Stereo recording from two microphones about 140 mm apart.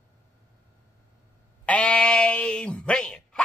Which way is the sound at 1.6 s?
10° left (ahead or behind).